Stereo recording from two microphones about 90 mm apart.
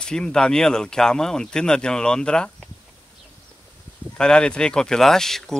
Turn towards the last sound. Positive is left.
turn(degrees=5)  # may be behind; listen again after turning